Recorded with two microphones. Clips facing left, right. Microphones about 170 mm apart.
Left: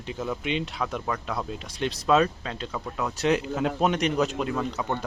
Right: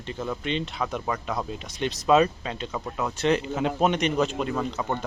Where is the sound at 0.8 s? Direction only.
5° right (ahead or behind).